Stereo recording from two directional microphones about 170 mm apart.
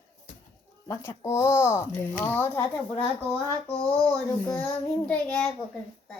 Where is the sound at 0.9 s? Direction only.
15° left (ahead or behind).